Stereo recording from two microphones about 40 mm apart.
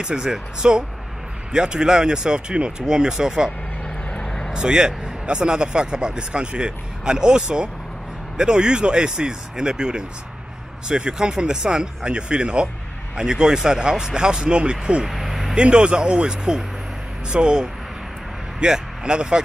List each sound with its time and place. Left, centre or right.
0.0 s speech: centre
4.1 s vehicle: centre
4.5 s speech: centre
15.0 s vehicle: centre
15.5 s speech: right